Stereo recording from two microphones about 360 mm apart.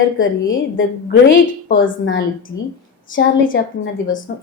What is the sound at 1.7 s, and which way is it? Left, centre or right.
A woman's voice, left.